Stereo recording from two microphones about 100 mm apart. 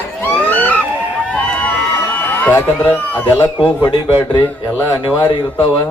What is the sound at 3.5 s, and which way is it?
A man's voice, 50° left (ahead or behind).